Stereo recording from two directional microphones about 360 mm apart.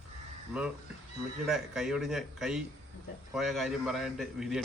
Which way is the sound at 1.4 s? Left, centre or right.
Centre.